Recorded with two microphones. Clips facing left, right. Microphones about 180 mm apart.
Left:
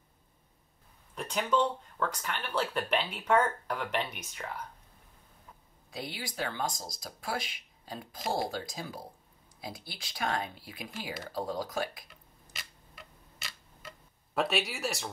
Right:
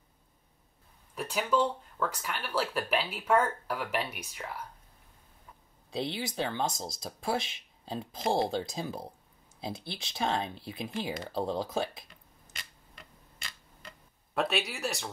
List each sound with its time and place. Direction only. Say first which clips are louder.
1.1 s speech: right 1 dB; 5° right (ahead or behind)
5.9 s speech: right 6 dB; 25° right (ahead or behind)
12.5 s tick-tock: left 1 dB; 5° left (ahead or behind)